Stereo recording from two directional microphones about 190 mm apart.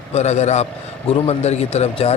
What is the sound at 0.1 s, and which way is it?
A man's voice, 35° left (ahead or behind).